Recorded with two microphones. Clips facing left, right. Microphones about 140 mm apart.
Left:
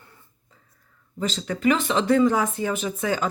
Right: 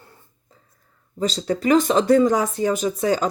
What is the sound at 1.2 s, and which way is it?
Speech, 35° right (ahead or behind).